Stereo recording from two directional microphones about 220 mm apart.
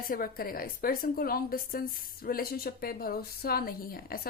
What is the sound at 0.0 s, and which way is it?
A woman's voice, 40° left (ahead or behind).